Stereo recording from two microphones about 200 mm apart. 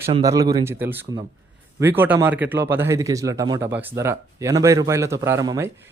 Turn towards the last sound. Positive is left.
turn(degrees=-15)  # may be behind; listen again after turning